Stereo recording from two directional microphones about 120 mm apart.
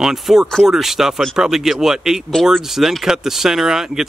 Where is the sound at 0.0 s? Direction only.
5° right (ahead or behind).